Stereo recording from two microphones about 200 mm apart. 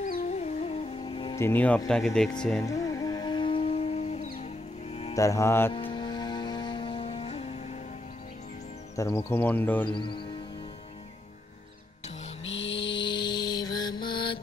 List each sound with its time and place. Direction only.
0.0 s music: 40° left (ahead or behind); by 1.4 s 25° left (ahead or behind)
1.4 s speech: 10° left (ahead or behind)
2.6 s music: 15° left (ahead or behind); by 4.5 s 30° left (ahead or behind)
5.1 s speech: 15° left (ahead or behind)
5.7 s music: 25° left (ahead or behind)
8.9 s speech: 15° left (ahead or behind)
9.9 s speech: 25° left (ahead or behind)
12.4 s music: 65° left (ahead or behind)
12.9 s mantra: 25° left (ahead or behind)